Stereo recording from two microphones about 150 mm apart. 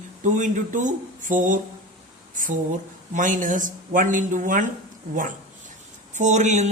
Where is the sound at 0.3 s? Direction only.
55° right (ahead or behind).